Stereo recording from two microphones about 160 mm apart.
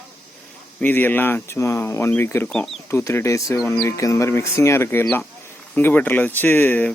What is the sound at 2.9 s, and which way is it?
Speech, 15° left (ahead or behind).